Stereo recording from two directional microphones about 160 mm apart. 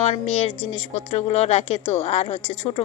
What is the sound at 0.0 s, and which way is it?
A woman's voice, 40° left (ahead or behind).